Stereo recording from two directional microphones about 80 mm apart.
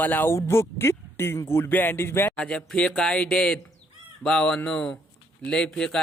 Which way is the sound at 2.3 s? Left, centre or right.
Centre.